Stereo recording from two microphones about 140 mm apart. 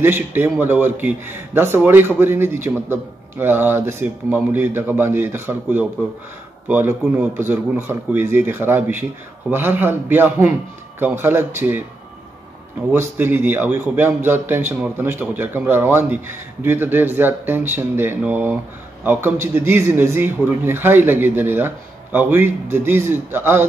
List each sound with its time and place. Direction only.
0.0 s a man's voice: 15° right (ahead or behind)
12.9 s a man's voice: 15° right (ahead or behind)